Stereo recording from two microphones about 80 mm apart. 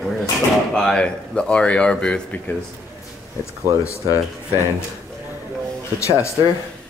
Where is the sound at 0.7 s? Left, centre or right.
Centre.